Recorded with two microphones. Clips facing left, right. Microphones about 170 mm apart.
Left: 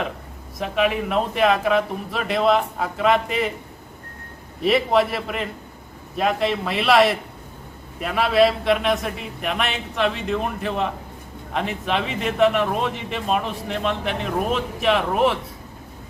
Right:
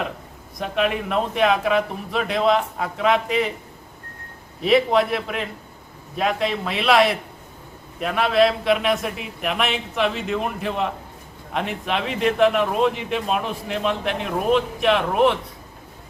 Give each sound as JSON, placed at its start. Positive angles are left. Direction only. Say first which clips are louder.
{"t": 0.6, "sound": "a man's voice", "louder": "left 1 dB", "side_deg": 0}
{"t": 4.6, "sound": "a man's voice", "louder": "right 1 dB", "side_deg": 0}